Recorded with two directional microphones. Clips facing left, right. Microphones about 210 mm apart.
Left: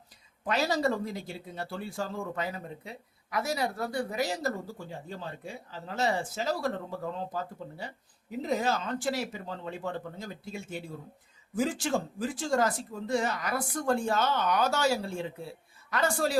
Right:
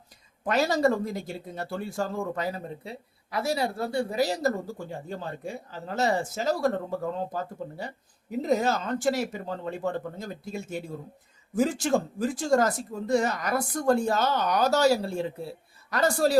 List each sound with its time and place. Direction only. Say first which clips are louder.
0.4 s speech: right 4 dB; 50° right (ahead or behind)